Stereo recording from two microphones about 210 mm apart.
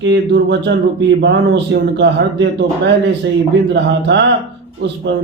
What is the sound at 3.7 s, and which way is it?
Speech, 55° right (ahead or behind).